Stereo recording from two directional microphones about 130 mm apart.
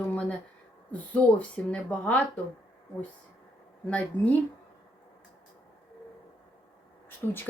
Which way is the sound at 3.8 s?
10° left (ahead or behind).